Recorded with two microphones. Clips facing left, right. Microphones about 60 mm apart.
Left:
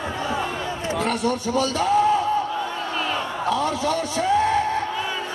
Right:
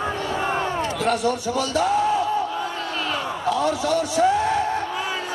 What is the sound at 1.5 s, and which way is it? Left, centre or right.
Speech, left.